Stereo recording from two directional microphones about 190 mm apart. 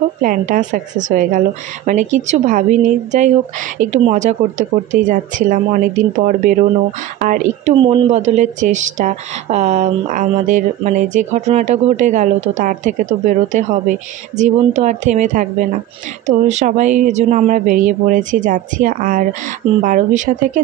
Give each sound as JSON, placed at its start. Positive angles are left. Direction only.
{"t": 0.2, "sound": "speech", "side_deg": -45}
{"t": 7.7, "sound": "speech", "side_deg": -25}